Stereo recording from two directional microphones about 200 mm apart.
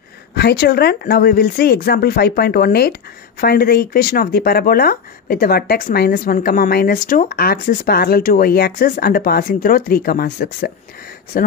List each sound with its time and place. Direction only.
0.3 s speech: 55° left (ahead or behind)